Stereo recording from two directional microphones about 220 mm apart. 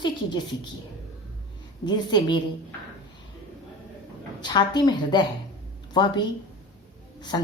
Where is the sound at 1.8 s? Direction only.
20° left (ahead or behind).